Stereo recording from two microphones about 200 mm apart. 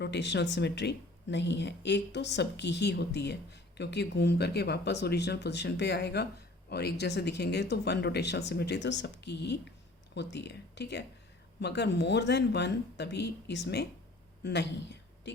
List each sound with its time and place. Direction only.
0.0 s speech: 60° left (ahead or behind)